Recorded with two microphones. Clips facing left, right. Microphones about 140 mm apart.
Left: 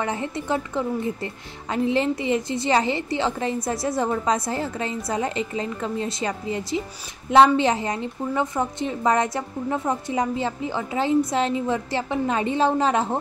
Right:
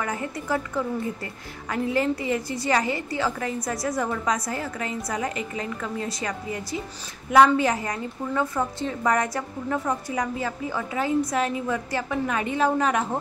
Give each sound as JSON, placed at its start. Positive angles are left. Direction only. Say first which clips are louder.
{"t": 0.0, "sound": "a woman's voice", "louder": "left 3 dB", "side_deg": 25}